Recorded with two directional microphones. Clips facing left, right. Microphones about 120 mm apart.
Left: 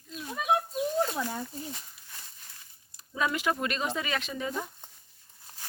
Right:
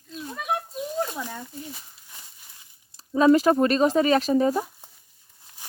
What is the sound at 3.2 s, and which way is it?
Speech, 35° right (ahead or behind).